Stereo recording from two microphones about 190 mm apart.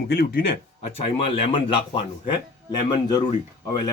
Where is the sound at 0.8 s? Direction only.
30° left (ahead or behind).